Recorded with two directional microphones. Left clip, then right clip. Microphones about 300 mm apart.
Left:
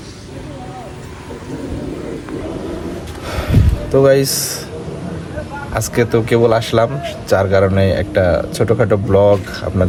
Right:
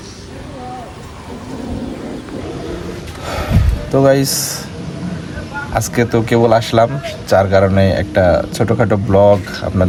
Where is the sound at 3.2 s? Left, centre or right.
Centre.